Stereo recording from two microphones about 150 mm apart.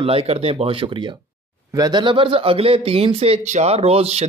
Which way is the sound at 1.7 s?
30° right (ahead or behind).